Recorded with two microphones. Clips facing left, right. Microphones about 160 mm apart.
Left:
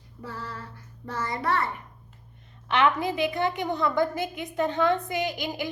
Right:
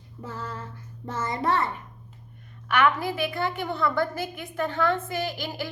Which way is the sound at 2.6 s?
20° left (ahead or behind).